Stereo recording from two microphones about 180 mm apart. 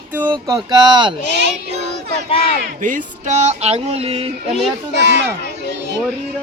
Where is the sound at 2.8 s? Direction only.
45° right (ahead or behind).